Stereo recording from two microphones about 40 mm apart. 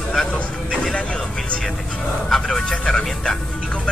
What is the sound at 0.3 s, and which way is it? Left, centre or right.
Vehicle, left.